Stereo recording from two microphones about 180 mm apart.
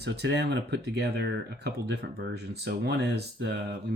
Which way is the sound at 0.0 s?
70° right (ahead or behind).